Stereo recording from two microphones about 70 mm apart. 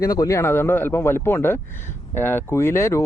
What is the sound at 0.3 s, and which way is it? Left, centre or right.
Speech, left.